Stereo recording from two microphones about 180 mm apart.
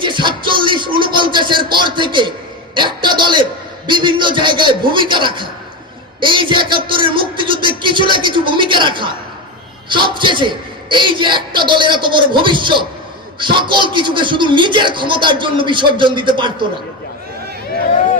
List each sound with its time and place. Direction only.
0.0 s a man's voice: 25° right (ahead or behind)